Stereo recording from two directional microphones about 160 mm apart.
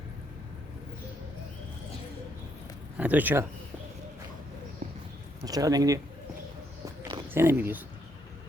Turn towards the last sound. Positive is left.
turn(degrees=-10)  # may be behind; listen again after turning